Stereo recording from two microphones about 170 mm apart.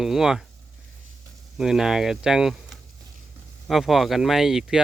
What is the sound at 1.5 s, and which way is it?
Speech, centre (ahead or behind).